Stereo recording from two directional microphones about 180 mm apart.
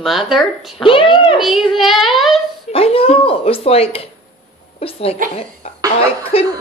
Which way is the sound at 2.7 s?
30° left (ahead or behind).